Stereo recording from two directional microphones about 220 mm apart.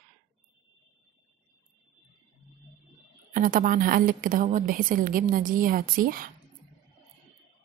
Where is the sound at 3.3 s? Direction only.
40° right (ahead or behind).